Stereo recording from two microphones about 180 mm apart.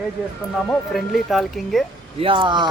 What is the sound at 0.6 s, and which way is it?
Speech, centre (ahead or behind).